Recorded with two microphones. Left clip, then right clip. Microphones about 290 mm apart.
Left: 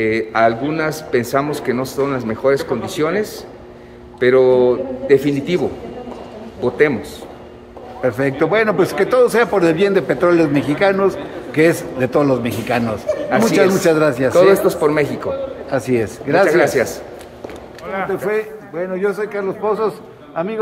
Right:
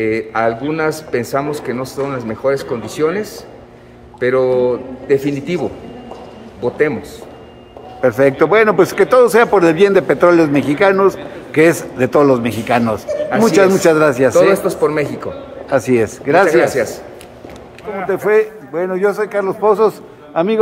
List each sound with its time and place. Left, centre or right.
0.0 s a man's voice: centre
8.0 s a man's voice: centre
14.5 s a man's voice: centre
15.7 s a man's voice: centre
16.4 s a man's voice: centre
18.1 s a man's voice: centre